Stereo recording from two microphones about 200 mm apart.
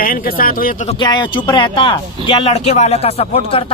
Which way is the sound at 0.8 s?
20° left (ahead or behind).